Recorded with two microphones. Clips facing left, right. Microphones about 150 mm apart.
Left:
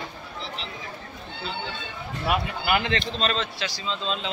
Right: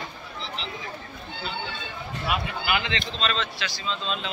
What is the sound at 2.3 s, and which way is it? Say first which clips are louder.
Speech: left 3 dB; 45° left (ahead or behind).